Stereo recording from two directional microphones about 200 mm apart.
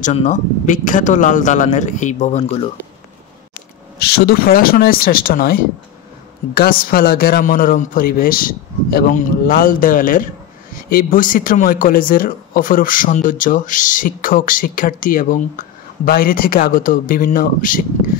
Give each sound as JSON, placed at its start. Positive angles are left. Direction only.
{"t": 0.0, "sound": "a man's voice", "side_deg": 35}
{"t": 4.0, "sound": "speech", "side_deg": 50}